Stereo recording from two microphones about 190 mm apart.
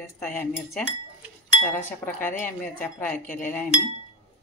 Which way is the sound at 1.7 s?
10° left (ahead or behind).